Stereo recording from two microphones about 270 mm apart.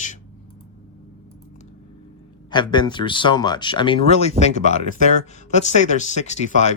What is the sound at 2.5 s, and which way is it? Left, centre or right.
Speech, centre.